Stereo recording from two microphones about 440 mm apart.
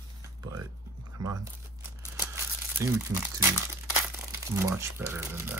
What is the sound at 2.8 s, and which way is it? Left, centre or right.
Speech, centre.